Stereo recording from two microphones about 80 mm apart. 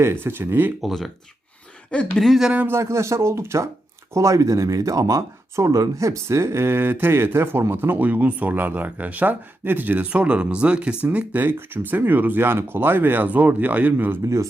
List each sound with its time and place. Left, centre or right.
0.0 s speech: right
0.8 s speech: centre
1.9 s speech: centre
2.2 s speech: centre
2.5 s speech: centre
2.7 s speech: right